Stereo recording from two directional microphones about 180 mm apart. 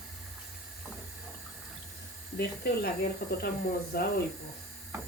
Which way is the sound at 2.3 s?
60° left (ahead or behind).